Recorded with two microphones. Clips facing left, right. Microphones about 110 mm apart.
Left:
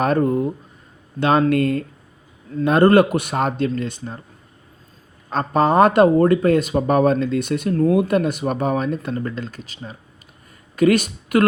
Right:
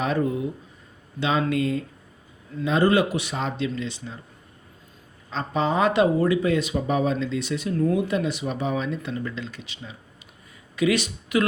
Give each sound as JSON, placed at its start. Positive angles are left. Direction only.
{"t": 0.0, "sound": "speech", "side_deg": 50}
{"t": 5.3, "sound": "speech", "side_deg": 55}